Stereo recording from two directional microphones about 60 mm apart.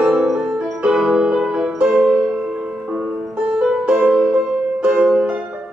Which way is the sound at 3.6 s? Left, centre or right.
Centre.